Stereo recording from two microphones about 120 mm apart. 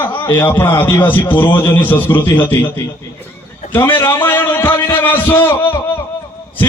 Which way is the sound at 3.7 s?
20° left (ahead or behind).